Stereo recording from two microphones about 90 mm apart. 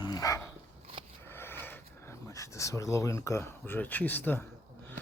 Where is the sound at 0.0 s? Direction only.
45° left (ahead or behind).